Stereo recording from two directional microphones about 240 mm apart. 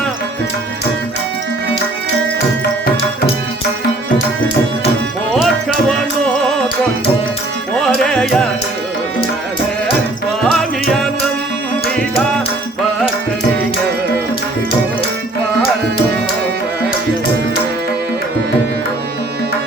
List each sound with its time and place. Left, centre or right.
7.8 s music: centre
10.4 s music: centre